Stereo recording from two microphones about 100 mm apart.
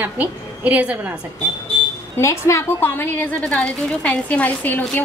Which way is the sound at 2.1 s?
30° left (ahead or behind).